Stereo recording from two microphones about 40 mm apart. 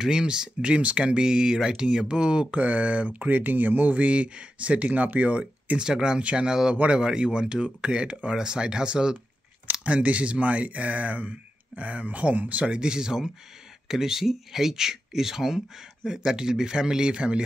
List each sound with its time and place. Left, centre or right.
0.0 s speech: centre
2.0 s speech: right
5.8 s speech: right
9.8 s speech: right
12.7 s speech: centre